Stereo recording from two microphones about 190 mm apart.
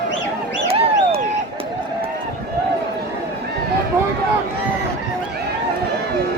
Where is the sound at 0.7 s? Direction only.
30° right (ahead or behind).